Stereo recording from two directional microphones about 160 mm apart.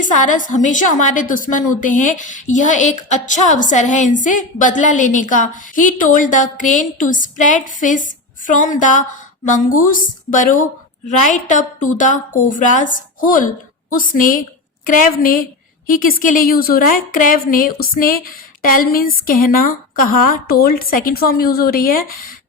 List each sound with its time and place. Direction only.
0.0 s a woman's voice: 55° left (ahead or behind)